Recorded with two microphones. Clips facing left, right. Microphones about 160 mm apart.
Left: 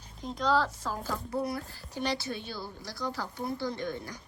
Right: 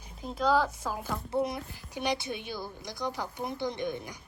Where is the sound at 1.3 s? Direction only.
20° right (ahead or behind).